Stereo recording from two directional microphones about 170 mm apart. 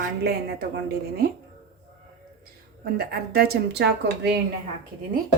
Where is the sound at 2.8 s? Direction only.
65° right (ahead or behind).